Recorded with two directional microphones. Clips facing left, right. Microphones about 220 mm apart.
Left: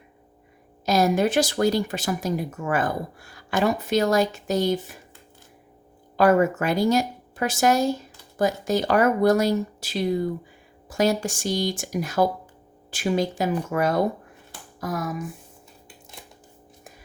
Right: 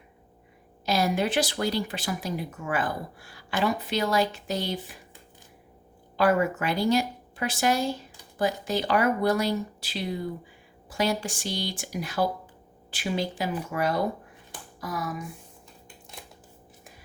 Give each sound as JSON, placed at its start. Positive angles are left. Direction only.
{"t": 0.9, "sound": "speech", "side_deg": 45}
{"t": 6.1, "sound": "speech", "side_deg": 45}
{"t": 16.2, "sound": "a sound", "side_deg": 0}